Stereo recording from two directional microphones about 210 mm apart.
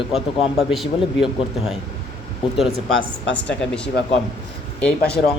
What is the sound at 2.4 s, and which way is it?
Speech, 25° left (ahead or behind).